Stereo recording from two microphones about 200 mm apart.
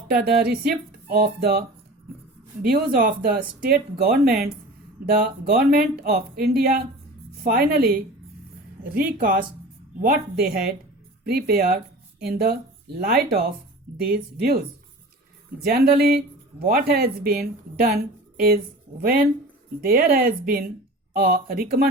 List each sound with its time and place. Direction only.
0.1 s speech: 50° right (ahead or behind)